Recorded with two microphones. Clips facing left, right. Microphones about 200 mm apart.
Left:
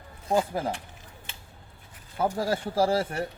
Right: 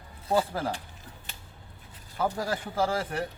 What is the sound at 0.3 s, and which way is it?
Speech, 15° left (ahead or behind).